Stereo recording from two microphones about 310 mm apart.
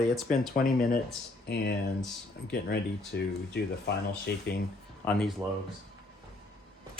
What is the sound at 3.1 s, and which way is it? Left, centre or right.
Speech, left.